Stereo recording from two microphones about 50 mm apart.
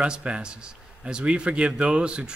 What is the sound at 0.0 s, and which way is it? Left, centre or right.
A man's voice, right.